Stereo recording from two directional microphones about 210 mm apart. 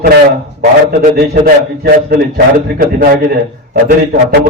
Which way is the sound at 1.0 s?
50° right (ahead or behind).